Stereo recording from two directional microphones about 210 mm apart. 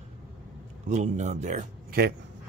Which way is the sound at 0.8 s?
35° right (ahead or behind).